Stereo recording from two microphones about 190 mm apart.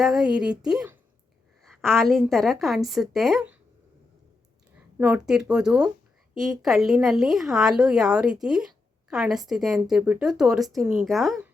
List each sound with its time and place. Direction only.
0.0 s a woman's voice: centre (ahead or behind)
4.9 s a woman's voice: 10° right (ahead or behind)